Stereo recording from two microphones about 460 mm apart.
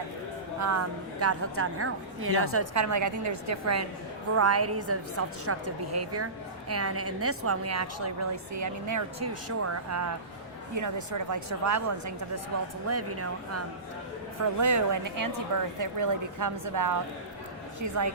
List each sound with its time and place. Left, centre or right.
0.6 s a woman's voice: right